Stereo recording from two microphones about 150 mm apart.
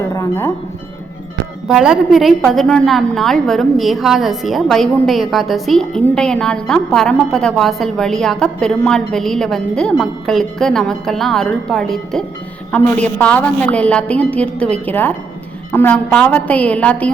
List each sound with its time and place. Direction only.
0.0 s music: 20° left (ahead or behind)
1.6 s a woman's voice: 5° right (ahead or behind)